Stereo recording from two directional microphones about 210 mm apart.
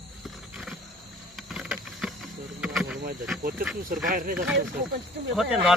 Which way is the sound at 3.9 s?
40° right (ahead or behind).